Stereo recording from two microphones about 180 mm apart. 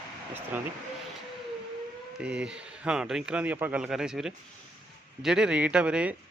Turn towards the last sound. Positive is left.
turn(degrees=-5)  # may be behind; listen again after turning